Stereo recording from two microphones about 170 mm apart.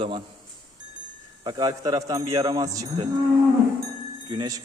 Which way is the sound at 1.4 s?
25° right (ahead or behind).